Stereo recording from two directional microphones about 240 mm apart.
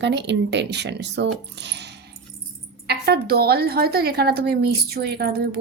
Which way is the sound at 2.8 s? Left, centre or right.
Right.